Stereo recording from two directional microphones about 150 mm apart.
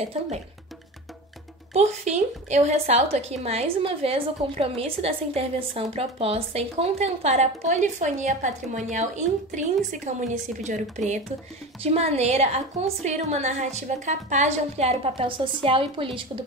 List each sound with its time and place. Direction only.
0.0 s a woman's voice: 45° right (ahead or behind)
1.7 s a woman's voice: 50° right (ahead or behind)
11.8 s a woman's voice: 40° right (ahead or behind)